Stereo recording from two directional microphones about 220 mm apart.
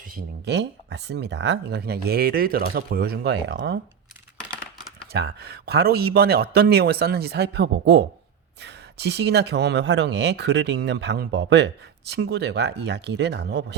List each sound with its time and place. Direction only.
0.1 s speech: 50° right (ahead or behind)
5.1 s speech: 45° right (ahead or behind)